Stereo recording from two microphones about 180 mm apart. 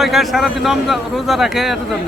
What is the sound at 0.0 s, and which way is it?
A man's voice, centre (ahead or behind).